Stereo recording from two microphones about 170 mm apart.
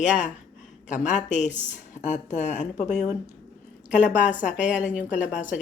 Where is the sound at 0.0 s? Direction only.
45° left (ahead or behind).